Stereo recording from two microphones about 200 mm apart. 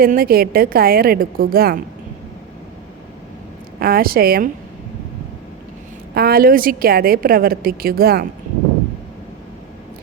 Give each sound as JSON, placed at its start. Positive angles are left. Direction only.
{"t": 0.0, "sound": "a woman's voice", "side_deg": -45}
{"t": 3.8, "sound": "a woman's voice", "side_deg": -50}
{"t": 6.1, "sound": "a woman's voice", "side_deg": -50}